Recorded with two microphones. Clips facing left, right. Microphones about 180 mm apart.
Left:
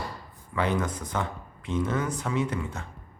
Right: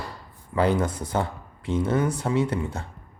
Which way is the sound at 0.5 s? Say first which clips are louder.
Right 5 dB; 35° right (ahead or behind).